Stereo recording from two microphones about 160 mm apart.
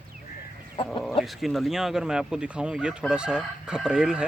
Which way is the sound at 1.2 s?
Centre (ahead or behind).